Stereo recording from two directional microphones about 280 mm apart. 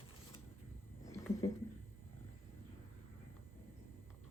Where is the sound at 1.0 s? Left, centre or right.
Centre.